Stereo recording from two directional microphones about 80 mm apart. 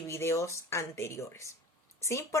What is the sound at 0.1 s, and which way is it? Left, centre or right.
A woman's voice, left.